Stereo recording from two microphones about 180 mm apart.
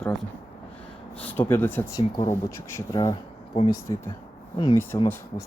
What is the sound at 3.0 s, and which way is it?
Speech, 30° left (ahead or behind).